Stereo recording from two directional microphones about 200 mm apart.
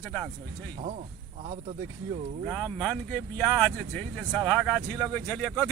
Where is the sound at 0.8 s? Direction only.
35° right (ahead or behind).